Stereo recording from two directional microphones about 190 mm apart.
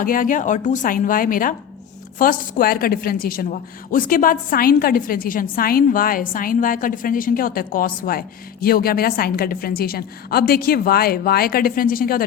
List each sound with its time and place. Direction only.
0.0 s a woman's voice: 45° left (ahead or behind)